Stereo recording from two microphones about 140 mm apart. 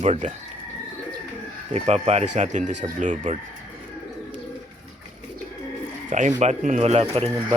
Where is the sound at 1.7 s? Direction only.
50° right (ahead or behind).